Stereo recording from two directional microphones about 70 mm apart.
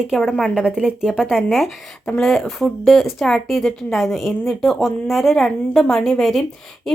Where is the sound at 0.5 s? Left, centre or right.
Centre.